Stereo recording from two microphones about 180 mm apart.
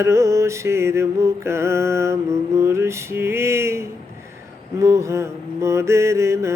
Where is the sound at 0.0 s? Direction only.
15° right (ahead or behind).